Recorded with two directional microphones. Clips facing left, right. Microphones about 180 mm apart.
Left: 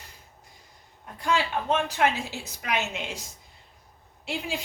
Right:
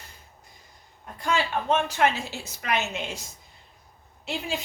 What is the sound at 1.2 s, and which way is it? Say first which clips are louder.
A woman's voice: even; 10° left (ahead or behind).